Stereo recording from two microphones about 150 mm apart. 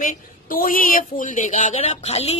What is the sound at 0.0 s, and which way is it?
Speech, 65° left (ahead or behind).